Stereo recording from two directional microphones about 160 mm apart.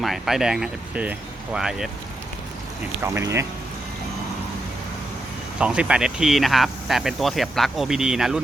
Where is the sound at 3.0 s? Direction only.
20° right (ahead or behind).